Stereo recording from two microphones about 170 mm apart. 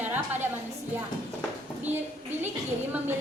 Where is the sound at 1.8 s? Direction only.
10° right (ahead or behind).